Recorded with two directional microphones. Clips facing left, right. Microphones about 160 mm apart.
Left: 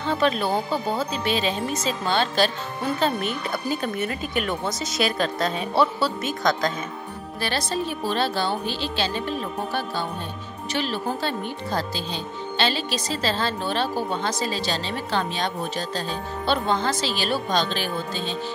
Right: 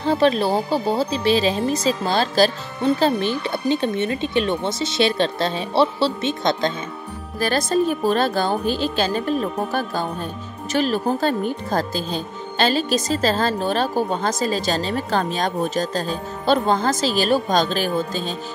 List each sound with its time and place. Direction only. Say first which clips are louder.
0.0 s speech: right 5 dB; 35° right (ahead or behind)
7.3 s speech: right 7 dB; 45° right (ahead or behind)